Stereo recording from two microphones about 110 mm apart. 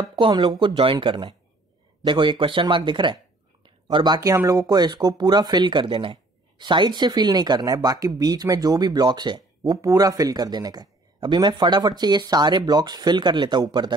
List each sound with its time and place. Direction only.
0.0 s speech: 45° right (ahead or behind)